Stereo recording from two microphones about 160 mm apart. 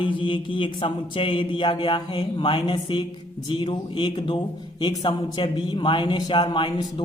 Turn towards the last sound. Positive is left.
turn(degrees=30)  # may be behind; listen again after turning